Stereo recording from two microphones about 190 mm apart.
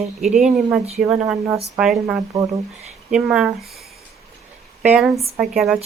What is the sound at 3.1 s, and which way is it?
Speech, 5° right (ahead or behind).